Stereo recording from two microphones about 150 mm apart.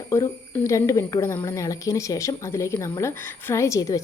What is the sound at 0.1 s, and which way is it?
Speech, 20° left (ahead or behind).